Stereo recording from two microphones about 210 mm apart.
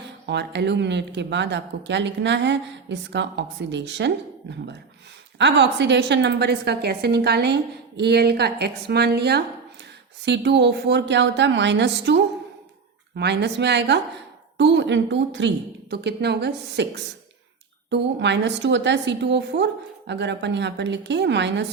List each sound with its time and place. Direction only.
0.3 s speech: 55° right (ahead or behind)
5.4 s a woman's voice: 55° right (ahead or behind)